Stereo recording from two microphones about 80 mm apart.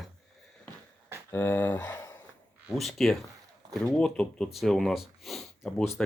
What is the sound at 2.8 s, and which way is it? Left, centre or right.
Speech, centre.